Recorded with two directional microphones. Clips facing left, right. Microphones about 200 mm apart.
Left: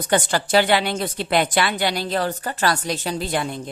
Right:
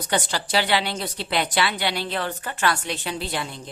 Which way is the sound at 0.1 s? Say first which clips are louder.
Left 6 dB; 50° left (ahead or behind).